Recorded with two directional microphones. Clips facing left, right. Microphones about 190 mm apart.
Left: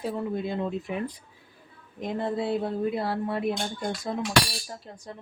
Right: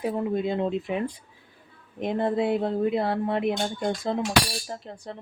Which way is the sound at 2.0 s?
20° right (ahead or behind).